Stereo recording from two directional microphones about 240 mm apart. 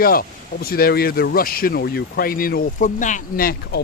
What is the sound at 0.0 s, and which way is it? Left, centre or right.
Speech, left.